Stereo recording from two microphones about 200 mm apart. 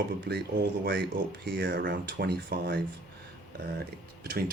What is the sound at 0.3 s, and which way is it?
Speech, 55° right (ahead or behind).